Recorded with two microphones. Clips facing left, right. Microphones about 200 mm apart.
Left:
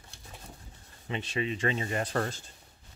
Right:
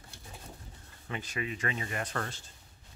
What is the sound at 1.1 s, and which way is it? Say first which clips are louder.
Speech: left 5 dB; 25° left (ahead or behind).